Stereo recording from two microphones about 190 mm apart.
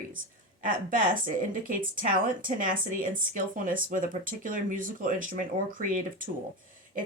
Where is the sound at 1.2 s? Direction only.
45° right (ahead or behind).